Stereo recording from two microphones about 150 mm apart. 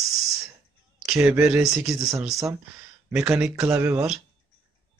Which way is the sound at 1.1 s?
10° right (ahead or behind).